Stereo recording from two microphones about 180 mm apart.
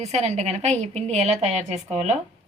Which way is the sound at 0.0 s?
40° right (ahead or behind).